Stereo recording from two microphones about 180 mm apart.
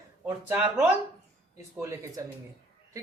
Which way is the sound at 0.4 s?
10° right (ahead or behind).